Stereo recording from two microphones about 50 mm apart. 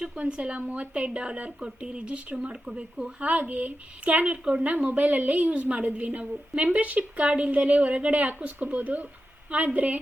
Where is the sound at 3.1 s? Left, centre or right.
Right.